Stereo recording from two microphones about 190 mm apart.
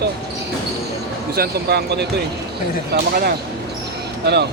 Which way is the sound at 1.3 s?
55° right (ahead or behind).